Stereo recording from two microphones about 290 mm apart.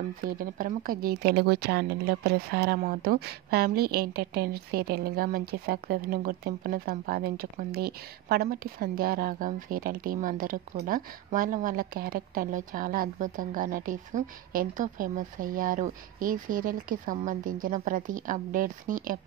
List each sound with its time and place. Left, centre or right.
0.2 s speech: right